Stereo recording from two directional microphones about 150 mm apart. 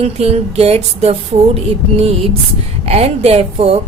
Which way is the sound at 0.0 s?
45° right (ahead or behind).